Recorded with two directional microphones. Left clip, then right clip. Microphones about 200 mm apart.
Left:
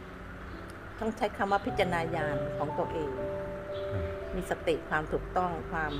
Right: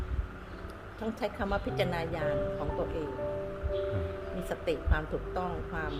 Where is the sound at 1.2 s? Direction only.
20° left (ahead or behind).